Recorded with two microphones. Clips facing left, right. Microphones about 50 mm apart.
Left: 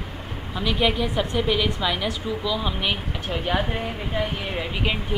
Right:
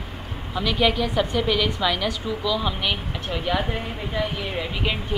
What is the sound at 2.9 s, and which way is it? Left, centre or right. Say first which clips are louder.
Speech: even; left.